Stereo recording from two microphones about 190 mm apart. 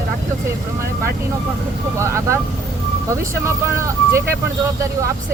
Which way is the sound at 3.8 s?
15° right (ahead or behind).